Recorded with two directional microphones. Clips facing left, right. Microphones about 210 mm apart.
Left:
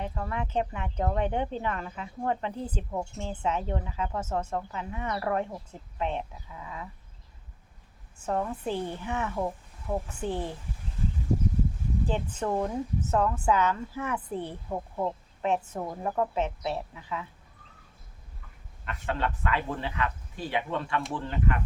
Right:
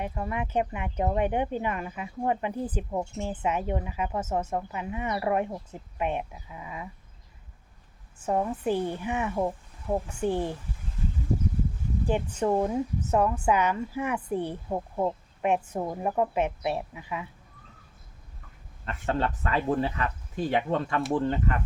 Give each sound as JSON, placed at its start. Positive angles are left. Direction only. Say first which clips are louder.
{"t": 0.0, "sound": "speech", "louder": "right 2 dB", "side_deg": -15}
{"t": 8.2, "sound": "speech", "louder": "right 3 dB", "side_deg": -10}
{"t": 12.0, "sound": "speech", "louder": "right 5 dB", "side_deg": -10}
{"t": 18.9, "sound": "speech", "louder": "right 3 dB", "side_deg": -40}